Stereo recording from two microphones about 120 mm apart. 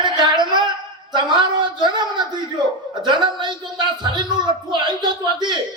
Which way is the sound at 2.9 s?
40° right (ahead or behind).